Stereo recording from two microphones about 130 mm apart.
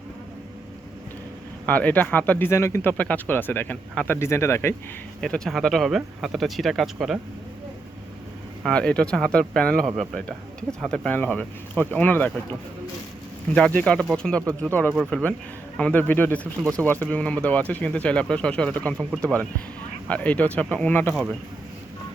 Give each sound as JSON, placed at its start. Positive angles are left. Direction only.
{"t": 1.6, "sound": "speech", "side_deg": 10}
{"t": 5.2, "sound": "speech", "side_deg": 5}
{"t": 8.6, "sound": "speech", "side_deg": 10}
{"t": 10.7, "sound": "speech", "side_deg": -20}
{"t": 10.9, "sound": "speech", "side_deg": 10}